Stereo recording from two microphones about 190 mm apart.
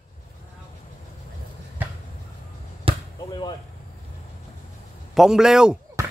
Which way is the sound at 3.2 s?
20° left (ahead or behind).